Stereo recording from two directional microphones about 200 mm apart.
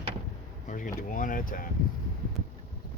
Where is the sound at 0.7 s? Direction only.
40° left (ahead or behind).